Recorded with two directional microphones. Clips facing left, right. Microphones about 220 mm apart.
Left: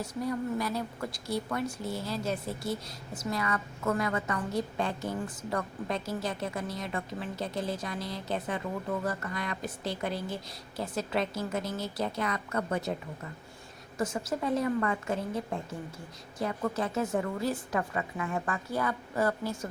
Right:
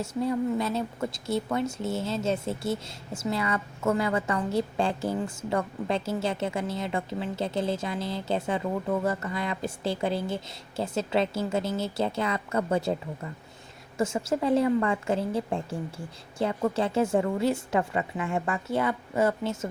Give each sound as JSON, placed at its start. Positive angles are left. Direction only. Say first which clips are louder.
{"t": 0.0, "sound": "a woman's voice", "louder": "right 5 dB", "side_deg": -25}
{"t": 14.0, "sound": "a woman's voice", "louder": "right 5 dB", "side_deg": -25}